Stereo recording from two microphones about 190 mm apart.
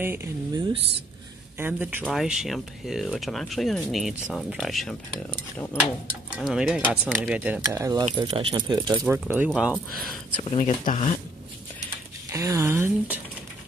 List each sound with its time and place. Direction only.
0.0 s speech: 10° right (ahead or behind)
8.2 s speech: 30° right (ahead or behind)
9.0 s speech: 10° right (ahead or behind)
10.6 s speech: 40° left (ahead or behind)
12.3 s speech: 15° right (ahead or behind)